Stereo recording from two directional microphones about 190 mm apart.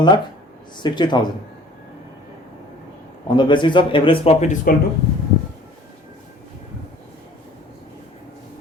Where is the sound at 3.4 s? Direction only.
25° left (ahead or behind).